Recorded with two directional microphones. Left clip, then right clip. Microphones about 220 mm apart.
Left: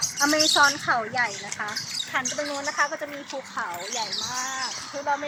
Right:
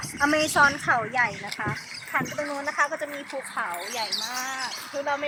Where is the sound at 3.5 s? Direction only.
45° right (ahead or behind).